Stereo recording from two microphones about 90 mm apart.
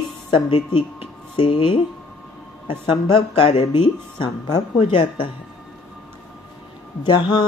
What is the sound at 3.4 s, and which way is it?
Speech, 80° left.